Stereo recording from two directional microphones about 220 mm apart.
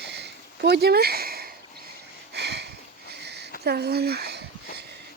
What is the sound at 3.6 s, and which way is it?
Speech, 45° right (ahead or behind).